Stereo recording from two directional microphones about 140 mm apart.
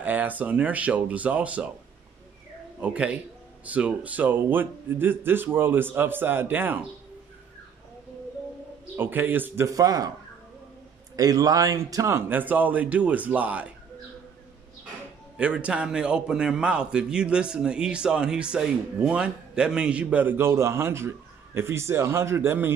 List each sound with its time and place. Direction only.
0.0 s a man's voice: 10° right (ahead or behind)
2.8 s a man's voice: 10° right (ahead or behind)
8.9 s a man's voice: 15° right (ahead or behind)
11.1 s a man's voice: 25° right (ahead or behind); by 13.7 s 10° right (ahead or behind)
15.3 s a man's voice: 10° right (ahead or behind)